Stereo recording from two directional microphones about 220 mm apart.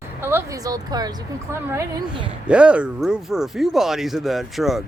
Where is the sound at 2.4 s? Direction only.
5° right (ahead or behind).